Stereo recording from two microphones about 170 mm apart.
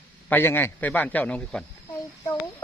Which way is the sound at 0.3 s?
10° left (ahead or behind).